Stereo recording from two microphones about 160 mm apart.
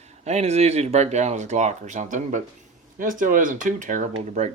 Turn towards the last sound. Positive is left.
turn(degrees=-45)  # may be behind; listen again after turning